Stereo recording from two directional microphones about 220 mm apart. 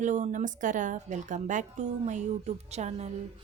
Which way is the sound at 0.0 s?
35° right (ahead or behind).